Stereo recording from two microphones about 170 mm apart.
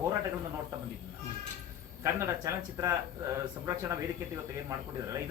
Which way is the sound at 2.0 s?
15° right (ahead or behind).